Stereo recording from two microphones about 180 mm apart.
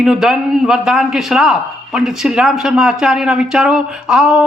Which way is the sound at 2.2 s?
5° right (ahead or behind).